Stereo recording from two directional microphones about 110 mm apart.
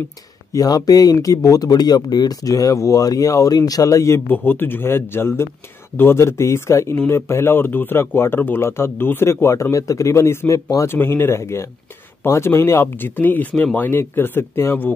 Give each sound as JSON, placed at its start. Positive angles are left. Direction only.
{"t": 0.5, "sound": "speech", "side_deg": 35}